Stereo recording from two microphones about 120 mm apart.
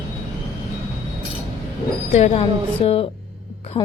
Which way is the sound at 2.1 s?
65° left (ahead or behind).